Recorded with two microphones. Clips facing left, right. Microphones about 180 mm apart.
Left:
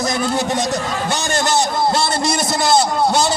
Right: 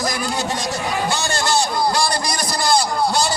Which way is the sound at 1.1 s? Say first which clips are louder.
Left 5 dB; 20° left (ahead or behind).